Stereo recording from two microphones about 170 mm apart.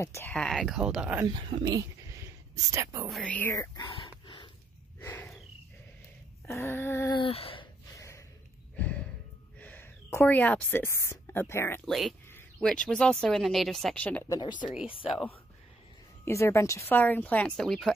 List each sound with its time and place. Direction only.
0.0 s speech: 15° left (ahead or behind)
0.3 s speech: centre (ahead or behind)
1.3 s speech: 20° right (ahead or behind)
3.1 s a sound: 5° left (ahead or behind); by 4.5 s 30° left (ahead or behind)
5.0 s snort: 10° left (ahead or behind)
6.4 s a sound: 15° left (ahead or behind)
7.2 s speech: 35° left (ahead or behind)
7.9 s gasp: 20° left (ahead or behind)
8.7 s sigh: 10° left (ahead or behind)
9.6 s a woman's voice: 10° left (ahead or behind)
11.8 s speech: centre (ahead or behind)
12.3 s a sound: 15° left (ahead or behind)
12.6 s speech: 5° left (ahead or behind)
16.3 s speech: 15° left (ahead or behind)